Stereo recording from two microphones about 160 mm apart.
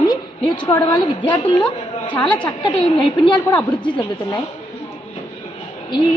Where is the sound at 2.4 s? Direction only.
30° left (ahead or behind).